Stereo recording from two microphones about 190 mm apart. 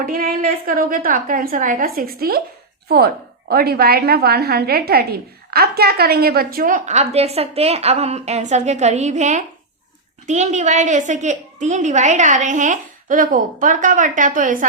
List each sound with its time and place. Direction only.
0.0 s a woman's voice: 50° right (ahead or behind)
3.5 s a woman's voice: 55° right (ahead or behind)